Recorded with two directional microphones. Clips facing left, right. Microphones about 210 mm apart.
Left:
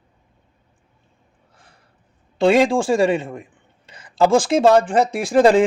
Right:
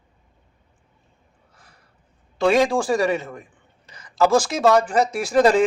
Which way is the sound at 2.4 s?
30° left (ahead or behind).